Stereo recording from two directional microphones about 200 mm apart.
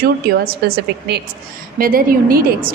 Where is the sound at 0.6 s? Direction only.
55° right (ahead or behind).